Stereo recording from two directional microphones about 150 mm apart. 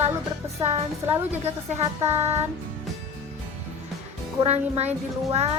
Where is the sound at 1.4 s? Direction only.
45° right (ahead or behind).